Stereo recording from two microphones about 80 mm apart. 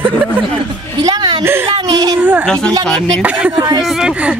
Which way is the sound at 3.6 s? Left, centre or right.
Right.